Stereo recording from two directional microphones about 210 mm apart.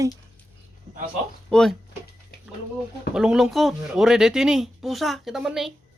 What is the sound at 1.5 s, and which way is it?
Speech, centre (ahead or behind).